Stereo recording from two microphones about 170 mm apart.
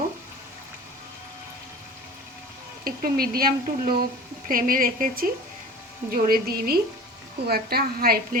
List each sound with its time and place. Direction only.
2.8 s speech: 60° right (ahead or behind)